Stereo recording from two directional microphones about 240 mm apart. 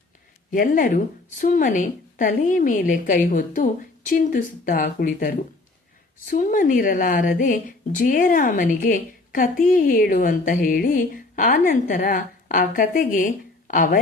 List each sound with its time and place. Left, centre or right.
0.5 s a woman's voice: left